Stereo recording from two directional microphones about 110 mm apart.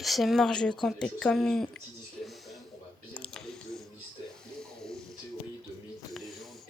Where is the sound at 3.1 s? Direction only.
10° left (ahead or behind).